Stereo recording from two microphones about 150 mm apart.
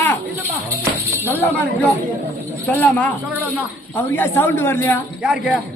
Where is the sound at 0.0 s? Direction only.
15° left (ahead or behind).